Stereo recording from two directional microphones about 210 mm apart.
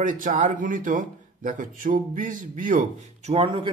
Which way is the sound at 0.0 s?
40° right (ahead or behind).